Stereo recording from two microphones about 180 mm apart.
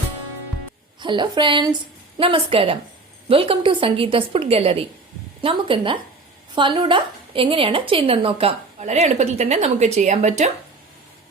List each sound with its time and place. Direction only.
0.9 s a woman's voice: 25° right (ahead or behind)